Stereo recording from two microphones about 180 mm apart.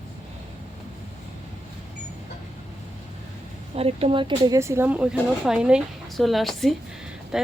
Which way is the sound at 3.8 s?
35° right (ahead or behind).